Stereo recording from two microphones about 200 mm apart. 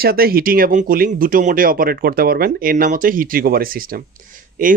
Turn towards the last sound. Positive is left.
turn(degrees=-40)  # may be behind; listen again after turning